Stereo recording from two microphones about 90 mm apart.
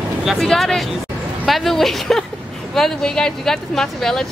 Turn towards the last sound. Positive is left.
turn(degrees=5)  # may be behind; listen again after turning